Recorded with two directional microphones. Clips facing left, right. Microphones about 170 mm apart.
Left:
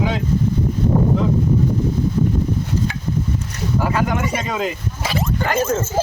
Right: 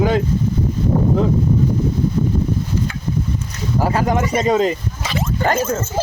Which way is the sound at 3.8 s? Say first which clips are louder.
Right 3 dB; 35° right (ahead or behind).